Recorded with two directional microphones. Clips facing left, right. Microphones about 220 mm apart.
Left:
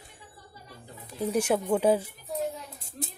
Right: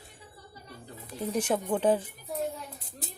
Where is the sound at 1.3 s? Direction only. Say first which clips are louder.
Left 3 dB; 10° left (ahead or behind).